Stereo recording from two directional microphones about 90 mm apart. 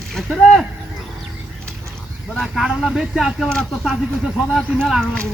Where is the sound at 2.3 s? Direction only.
Centre (ahead or behind).